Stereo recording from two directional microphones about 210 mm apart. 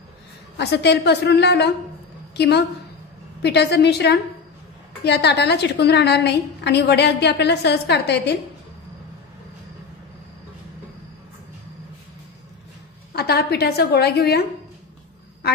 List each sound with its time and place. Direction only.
0.6 s a woman's voice: 55° left (ahead or behind)
13.1 s a woman's voice: 50° left (ahead or behind)
15.4 s quack: 50° left (ahead or behind)